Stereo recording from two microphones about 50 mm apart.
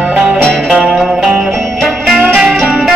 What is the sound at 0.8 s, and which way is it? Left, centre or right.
Music, centre.